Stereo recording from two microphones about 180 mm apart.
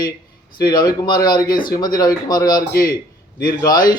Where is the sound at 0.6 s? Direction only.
25° left (ahead or behind).